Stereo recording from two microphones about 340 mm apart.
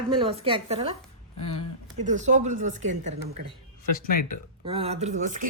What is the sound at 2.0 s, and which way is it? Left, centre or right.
Speech, right.